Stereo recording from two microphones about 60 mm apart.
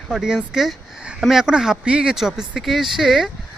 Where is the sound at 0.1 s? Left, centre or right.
Centre.